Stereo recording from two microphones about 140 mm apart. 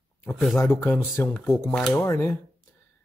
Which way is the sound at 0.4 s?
Centre (ahead or behind).